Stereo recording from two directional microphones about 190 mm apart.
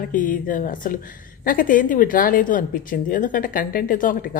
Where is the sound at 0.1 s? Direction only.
45° left (ahead or behind).